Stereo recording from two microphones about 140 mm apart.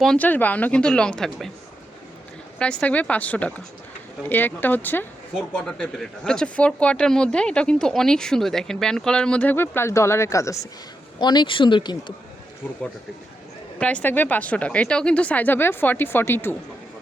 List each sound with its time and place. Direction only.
0.0 s speech: 5° left (ahead or behind)
2.6 s speech: 10° left (ahead or behind); by 12.1 s 35° left (ahead or behind)
13.7 s speech: 10° left (ahead or behind)